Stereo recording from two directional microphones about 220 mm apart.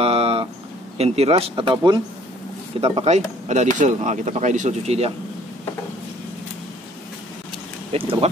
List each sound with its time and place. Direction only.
0.0 s a sound: 25° right (ahead or behind)
0.9 s speech: 30° right (ahead or behind)
7.9 s speech: 25° right (ahead or behind)